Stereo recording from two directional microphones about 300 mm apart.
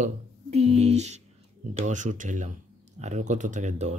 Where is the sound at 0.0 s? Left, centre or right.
Right.